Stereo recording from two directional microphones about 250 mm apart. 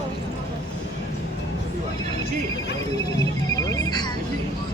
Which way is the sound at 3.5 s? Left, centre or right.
Centre.